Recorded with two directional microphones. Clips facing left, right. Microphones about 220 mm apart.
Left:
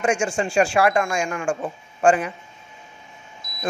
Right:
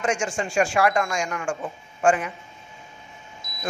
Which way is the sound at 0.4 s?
30° left (ahead or behind).